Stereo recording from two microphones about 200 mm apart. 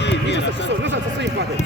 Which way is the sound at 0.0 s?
60° left (ahead or behind).